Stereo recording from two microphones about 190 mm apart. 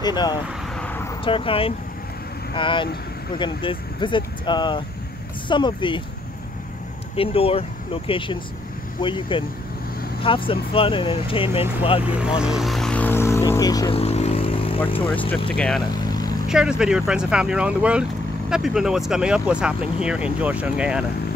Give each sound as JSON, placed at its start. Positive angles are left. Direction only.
{"t": 0.0, "sound": "speech", "side_deg": 20}
{"t": 0.7, "sound": "vehicle", "side_deg": 10}
{"t": 1.2, "sound": "speech", "side_deg": 30}
{"t": 7.2, "sound": "speech", "side_deg": 30}
{"t": 12.4, "sound": "speech", "side_deg": 0}
{"t": 13.9, "sound": "vehicle", "side_deg": 35}
{"t": 14.9, "sound": "speech", "side_deg": 30}
{"t": 15.5, "sound": "speech", "side_deg": 5}
{"t": 16.0, "sound": "vehicle", "side_deg": 20}
{"t": 16.4, "sound": "speech", "side_deg": -5}